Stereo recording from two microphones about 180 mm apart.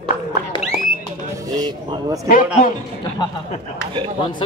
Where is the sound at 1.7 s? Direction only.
25° right (ahead or behind).